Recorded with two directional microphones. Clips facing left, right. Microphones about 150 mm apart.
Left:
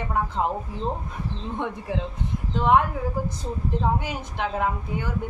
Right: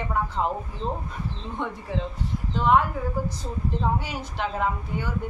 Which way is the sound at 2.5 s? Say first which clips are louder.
Left 1 dB; 20° left (ahead or behind).